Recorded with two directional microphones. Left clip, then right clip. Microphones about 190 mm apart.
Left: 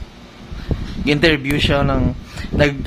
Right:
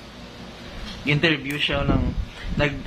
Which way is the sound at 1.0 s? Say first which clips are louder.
Left 6 dB; 60° left (ahead or behind).